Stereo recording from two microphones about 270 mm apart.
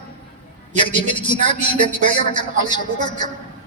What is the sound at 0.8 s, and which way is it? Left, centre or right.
A man's voice, centre.